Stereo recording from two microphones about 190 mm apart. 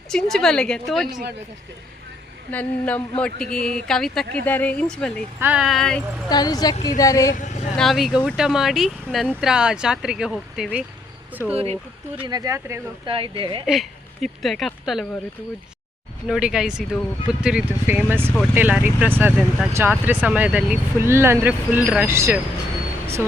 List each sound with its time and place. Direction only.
0.1 s speech: 5° left (ahead or behind)
2.5 s a sound: 10° left (ahead or behind)
3.8 s speech: 5° left (ahead or behind)
4.4 s a sound: 10° left (ahead or behind)
5.4 s speech: 5° right (ahead or behind)
6.2 s a woman's voice: 20° left (ahead or behind)
7.0 s a sound: 20° left (ahead or behind)
7.3 s speech: 40° left (ahead or behind)
7.8 s speech: centre (ahead or behind)
11.5 s speech: 30° right (ahead or behind)
12.2 s speech: 20° right (ahead or behind)
13.1 s speech: 30° right (ahead or behind)
13.7 s speech: centre (ahead or behind)
16.2 s speech: 5° right (ahead or behind)